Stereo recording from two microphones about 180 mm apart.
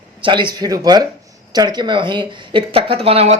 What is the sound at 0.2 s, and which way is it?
A man's voice, 25° right (ahead or behind).